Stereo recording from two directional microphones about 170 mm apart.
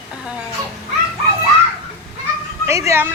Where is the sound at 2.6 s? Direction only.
15° right (ahead or behind).